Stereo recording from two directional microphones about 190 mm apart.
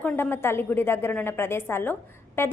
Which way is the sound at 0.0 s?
10° left (ahead or behind).